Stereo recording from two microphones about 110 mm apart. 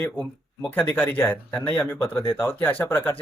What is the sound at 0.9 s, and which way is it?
Speech, 20° left (ahead or behind).